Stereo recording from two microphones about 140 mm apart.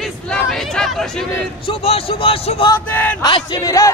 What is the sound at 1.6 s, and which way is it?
A man's voice, 40° left (ahead or behind).